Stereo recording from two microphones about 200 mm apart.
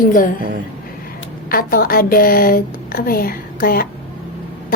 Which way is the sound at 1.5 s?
45° left (ahead or behind).